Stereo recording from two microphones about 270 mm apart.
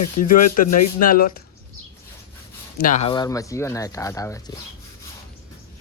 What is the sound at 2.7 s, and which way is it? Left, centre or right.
Speech, left.